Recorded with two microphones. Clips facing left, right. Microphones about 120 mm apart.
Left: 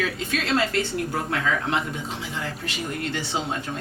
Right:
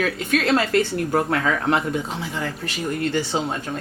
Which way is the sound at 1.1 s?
55° right (ahead or behind).